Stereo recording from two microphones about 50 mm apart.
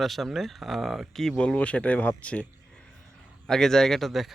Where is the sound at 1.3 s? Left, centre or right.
Left.